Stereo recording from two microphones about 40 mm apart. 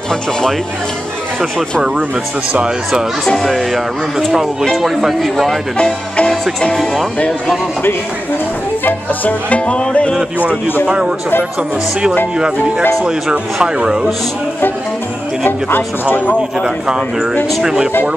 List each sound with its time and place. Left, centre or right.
0.1 s speech: centre
3.4 s speech: centre
4.6 s speech: centre
6.7 s speech: centre
8.8 s music: left
9.7 s music: left
10.9 s speech: right
12.4 s speech: right
15.4 s speech: left
16.6 s speech: centre